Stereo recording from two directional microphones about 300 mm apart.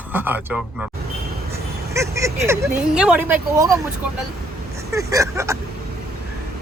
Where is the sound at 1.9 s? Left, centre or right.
Centre.